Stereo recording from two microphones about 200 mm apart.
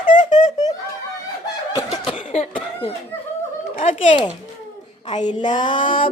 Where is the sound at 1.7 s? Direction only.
25° left (ahead or behind).